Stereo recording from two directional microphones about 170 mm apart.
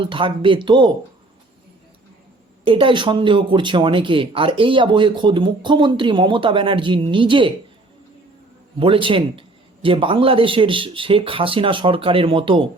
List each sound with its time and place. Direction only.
0.0 s speech: 30° right (ahead or behind)
2.6 s speech: 30° right (ahead or behind)
8.8 s speech: 30° right (ahead or behind)